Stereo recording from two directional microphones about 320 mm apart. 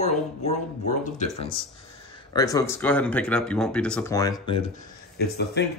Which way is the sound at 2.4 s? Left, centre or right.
Centre.